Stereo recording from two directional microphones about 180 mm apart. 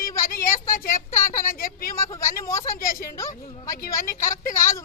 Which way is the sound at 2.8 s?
50° left (ahead or behind).